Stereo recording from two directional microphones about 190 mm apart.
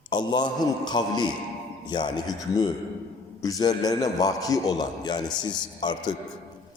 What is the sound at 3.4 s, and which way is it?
A man's voice, 20° left (ahead or behind).